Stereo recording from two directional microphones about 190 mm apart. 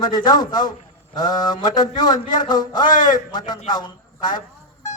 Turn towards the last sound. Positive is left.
turn(degrees=20)  # may be behind; listen again after turning